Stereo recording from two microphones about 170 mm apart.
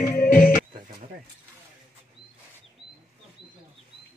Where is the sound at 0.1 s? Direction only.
60° left (ahead or behind).